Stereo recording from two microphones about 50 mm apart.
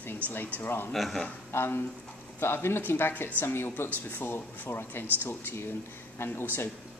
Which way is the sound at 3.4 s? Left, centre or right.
Left.